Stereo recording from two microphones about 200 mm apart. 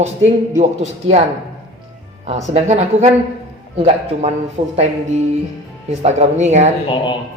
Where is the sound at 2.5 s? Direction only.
30° right (ahead or behind).